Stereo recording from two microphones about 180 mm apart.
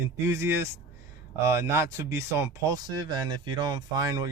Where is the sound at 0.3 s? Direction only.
15° right (ahead or behind).